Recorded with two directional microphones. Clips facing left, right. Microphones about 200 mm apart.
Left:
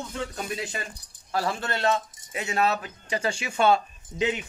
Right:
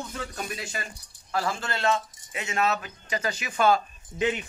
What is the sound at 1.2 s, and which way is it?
Speech, 35° left (ahead or behind).